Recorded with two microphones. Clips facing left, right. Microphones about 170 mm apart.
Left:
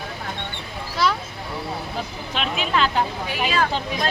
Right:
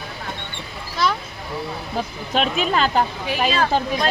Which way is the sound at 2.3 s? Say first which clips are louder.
Right 4 dB; 45° right (ahead or behind).